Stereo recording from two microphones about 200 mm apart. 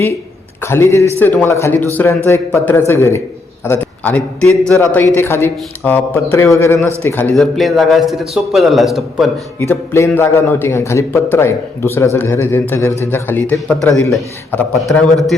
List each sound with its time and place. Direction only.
0.6 s a man's voice: 10° left (ahead or behind)
9.6 s a man's voice: 15° left (ahead or behind)